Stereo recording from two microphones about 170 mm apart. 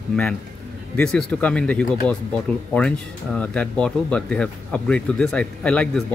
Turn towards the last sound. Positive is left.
turn(degrees=5)  # may be behind; listen again after turning